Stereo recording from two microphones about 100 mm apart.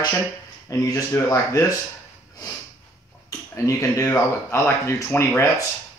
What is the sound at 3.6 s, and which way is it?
Speech, 30° left (ahead or behind).